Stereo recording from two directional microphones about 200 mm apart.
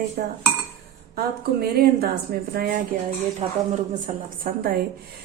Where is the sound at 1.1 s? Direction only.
50° right (ahead or behind).